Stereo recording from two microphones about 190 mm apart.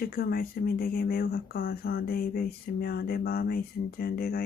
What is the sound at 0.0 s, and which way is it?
Speech, 50° left (ahead or behind).